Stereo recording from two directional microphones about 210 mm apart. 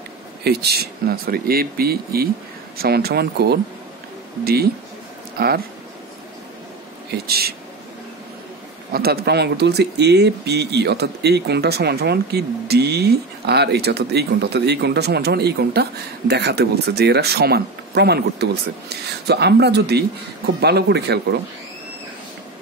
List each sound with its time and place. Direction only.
0.4 s speech: 50° right (ahead or behind)
5.4 s speech: 45° right (ahead or behind)
7.1 s speech: 50° right (ahead or behind)
8.9 s speech: 50° right (ahead or behind)